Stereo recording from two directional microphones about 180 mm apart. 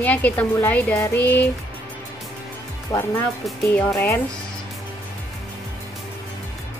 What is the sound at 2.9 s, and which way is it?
Speech, 15° left (ahead or behind).